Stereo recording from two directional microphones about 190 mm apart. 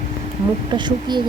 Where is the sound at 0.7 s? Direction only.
25° right (ahead or behind).